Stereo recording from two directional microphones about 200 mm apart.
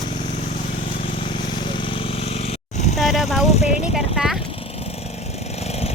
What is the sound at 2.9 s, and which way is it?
Vehicle, centre (ahead or behind).